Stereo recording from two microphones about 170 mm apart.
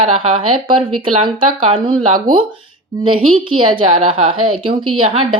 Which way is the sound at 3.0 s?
30° right (ahead or behind).